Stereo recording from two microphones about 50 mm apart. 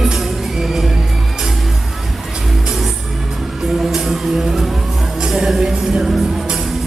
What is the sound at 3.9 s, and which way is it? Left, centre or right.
Music, centre.